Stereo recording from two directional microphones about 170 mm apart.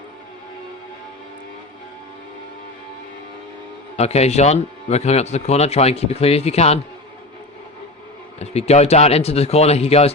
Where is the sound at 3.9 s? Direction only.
40° left (ahead or behind).